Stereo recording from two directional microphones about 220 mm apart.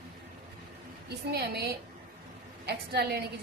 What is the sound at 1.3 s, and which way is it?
A woman's voice, 45° right (ahead or behind).